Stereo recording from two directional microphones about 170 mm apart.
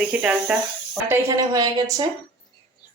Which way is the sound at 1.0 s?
15° right (ahead or behind).